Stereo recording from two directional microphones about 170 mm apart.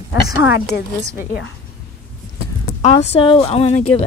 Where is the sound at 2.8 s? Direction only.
40° left (ahead or behind).